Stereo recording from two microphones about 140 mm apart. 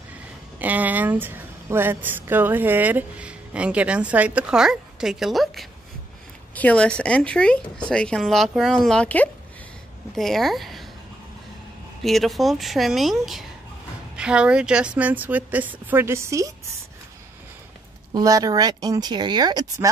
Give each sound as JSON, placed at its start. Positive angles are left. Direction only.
{"t": 0.6, "sound": "a woman's voice", "side_deg": -10}
{"t": 12.0, "sound": "a woman's voice", "side_deg": 0}
{"t": 18.1, "sound": "speech", "side_deg": -25}